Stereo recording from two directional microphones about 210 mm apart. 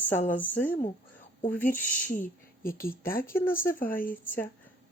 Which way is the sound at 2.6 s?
45° left (ahead or behind).